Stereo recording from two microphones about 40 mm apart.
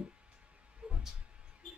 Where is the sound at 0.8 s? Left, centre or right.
Right.